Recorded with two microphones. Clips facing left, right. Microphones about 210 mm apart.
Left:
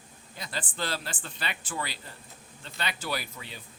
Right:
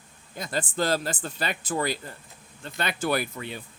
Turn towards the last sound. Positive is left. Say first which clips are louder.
# right 8 dB
turn(degrees=-55)  # may be behind; listen again after turning